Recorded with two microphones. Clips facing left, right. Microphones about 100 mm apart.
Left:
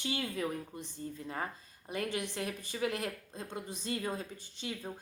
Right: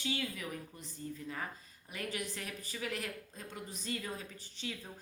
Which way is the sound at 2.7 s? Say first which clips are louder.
Left 4 dB; 20° left (ahead or behind).